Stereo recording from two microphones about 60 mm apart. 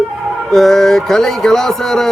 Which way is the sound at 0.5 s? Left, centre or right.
Centre.